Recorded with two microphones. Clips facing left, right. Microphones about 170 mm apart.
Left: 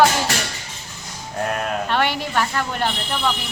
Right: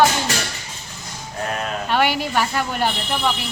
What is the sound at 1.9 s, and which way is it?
Speech, 5° right (ahead or behind).